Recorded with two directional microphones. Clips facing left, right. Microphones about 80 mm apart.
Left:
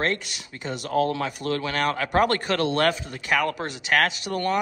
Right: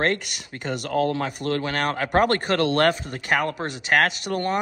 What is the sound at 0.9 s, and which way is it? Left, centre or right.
Speech, right.